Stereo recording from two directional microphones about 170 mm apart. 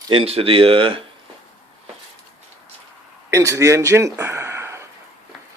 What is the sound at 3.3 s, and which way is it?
Speech, 15° right (ahead or behind).